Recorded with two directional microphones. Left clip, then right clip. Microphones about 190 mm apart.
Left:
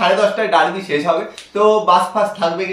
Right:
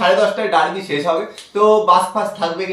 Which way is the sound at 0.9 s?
15° left (ahead or behind).